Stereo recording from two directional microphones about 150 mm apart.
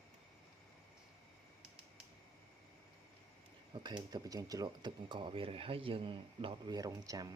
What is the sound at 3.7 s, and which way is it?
Speech, 30° right (ahead or behind).